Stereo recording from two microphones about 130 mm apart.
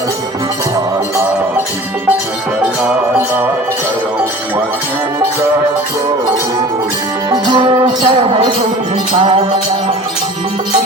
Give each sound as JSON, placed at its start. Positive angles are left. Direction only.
{"t": 7.3, "sound": "music", "side_deg": -30}